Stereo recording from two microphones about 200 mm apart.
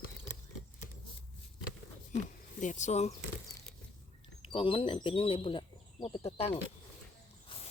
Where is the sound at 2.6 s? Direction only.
35° left (ahead or behind).